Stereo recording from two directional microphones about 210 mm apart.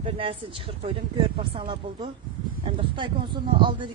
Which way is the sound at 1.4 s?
25° right (ahead or behind).